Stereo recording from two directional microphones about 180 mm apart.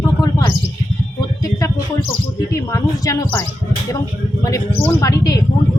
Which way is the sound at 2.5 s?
15° left (ahead or behind).